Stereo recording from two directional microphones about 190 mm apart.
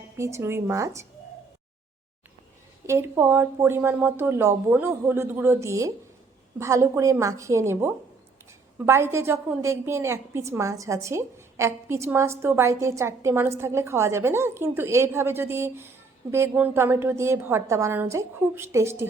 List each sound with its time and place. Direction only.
0.2 s a woman's voice: 15° right (ahead or behind)
2.8 s a woman's voice: 15° right (ahead or behind)